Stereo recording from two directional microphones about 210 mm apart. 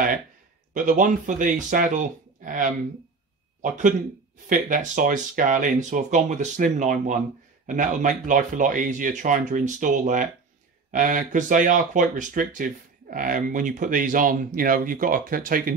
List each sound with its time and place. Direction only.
0.7 s speech: 40° right (ahead or behind)